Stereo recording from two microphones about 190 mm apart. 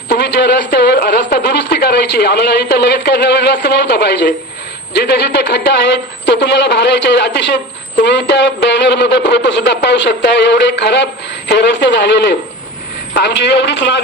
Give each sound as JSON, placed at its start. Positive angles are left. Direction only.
{"t": 0.1, "sound": "speech", "side_deg": 60}